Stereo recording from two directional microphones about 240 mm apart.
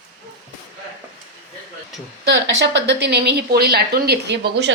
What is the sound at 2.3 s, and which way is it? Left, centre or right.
Speech, right.